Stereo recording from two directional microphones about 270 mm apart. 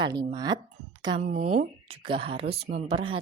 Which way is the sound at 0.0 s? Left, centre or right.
Centre.